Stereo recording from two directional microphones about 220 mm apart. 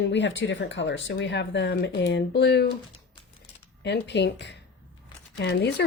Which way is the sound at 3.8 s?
50° left (ahead or behind).